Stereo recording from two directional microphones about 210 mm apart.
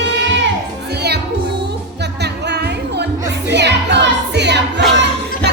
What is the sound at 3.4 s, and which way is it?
Music, 55° right (ahead or behind).